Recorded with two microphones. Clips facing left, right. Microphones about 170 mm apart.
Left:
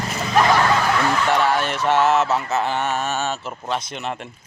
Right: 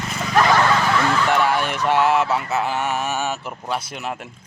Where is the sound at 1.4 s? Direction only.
10° right (ahead or behind).